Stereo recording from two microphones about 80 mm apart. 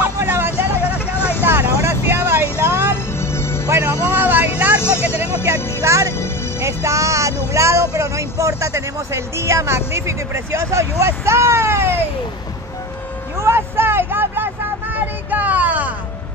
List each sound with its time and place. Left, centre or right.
0.0 s vehicle: right
0.9 s vehicle: left
1.4 s vehicle: right
3.2 s music: left
3.6 s music: right
5.8 s music: right
7.5 s speech: right
13.4 s vehicle: right